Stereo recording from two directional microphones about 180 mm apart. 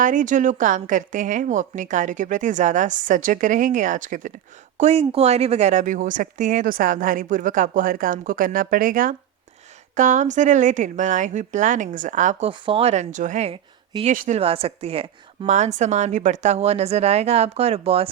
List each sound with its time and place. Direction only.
0.0 s speech: 45° right (ahead or behind)
4.8 s speech: 35° right (ahead or behind)
12.5 s a woman's voice: 30° right (ahead or behind)
14.1 s a woman's voice: 45° right (ahead or behind)